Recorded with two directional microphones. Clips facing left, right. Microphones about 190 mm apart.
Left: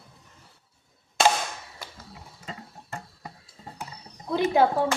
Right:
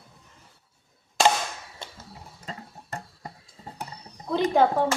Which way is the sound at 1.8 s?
25° right (ahead or behind).